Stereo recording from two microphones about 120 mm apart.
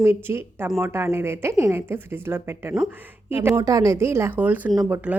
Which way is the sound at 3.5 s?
30° right (ahead or behind).